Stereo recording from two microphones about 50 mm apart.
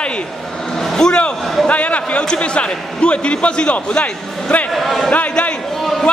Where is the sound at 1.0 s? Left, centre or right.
Centre.